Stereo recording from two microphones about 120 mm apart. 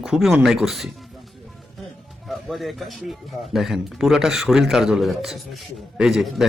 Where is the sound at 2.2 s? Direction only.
Centre (ahead or behind).